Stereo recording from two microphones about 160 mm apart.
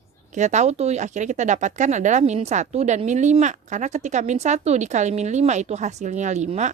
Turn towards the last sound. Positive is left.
turn(degrees=-45)  # may be behind; listen again after turning